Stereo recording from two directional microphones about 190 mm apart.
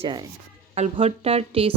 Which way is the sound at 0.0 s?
25° right (ahead or behind).